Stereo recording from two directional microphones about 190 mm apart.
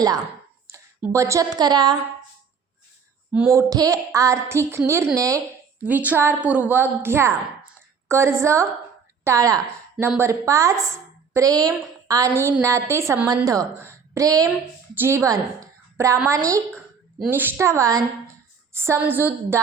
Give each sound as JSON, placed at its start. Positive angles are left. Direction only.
{"t": 0.7, "sound": "speech", "side_deg": -15}
{"t": 3.3, "sound": "a woman's voice", "side_deg": -10}